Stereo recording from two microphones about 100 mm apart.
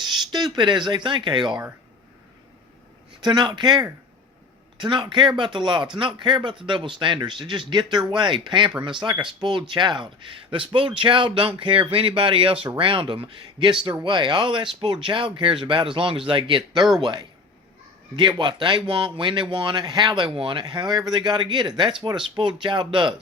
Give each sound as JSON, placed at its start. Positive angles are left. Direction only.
{"t": 0.0, "sound": "speech", "side_deg": -45}
{"t": 3.2, "sound": "a man's voice", "side_deg": -50}